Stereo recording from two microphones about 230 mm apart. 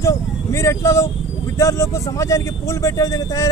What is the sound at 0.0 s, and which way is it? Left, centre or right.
Speech, centre.